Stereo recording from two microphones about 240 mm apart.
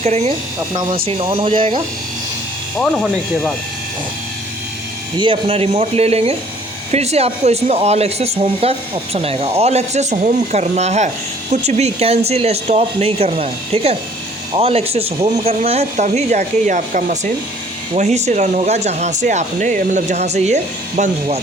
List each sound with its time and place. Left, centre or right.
0.0 s speech: right
2.7 s speech: centre
5.2 s speech: right